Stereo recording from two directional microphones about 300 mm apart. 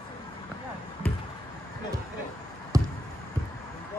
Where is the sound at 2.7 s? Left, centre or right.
Centre.